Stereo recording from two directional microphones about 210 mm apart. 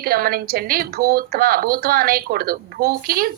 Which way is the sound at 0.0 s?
45° right (ahead or behind).